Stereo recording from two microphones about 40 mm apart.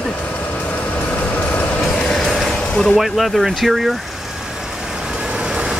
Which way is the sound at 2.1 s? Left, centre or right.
Centre.